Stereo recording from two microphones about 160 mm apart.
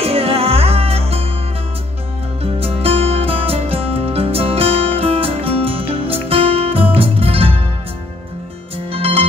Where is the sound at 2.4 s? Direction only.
40° right (ahead or behind).